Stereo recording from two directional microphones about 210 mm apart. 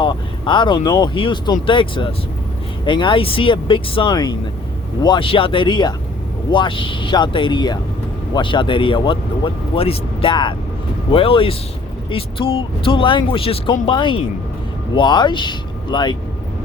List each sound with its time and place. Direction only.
0.0 s speech: 20° left (ahead or behind)